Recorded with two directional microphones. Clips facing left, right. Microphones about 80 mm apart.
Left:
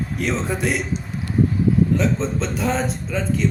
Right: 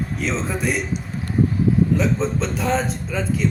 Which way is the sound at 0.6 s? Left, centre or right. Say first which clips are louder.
Even; left.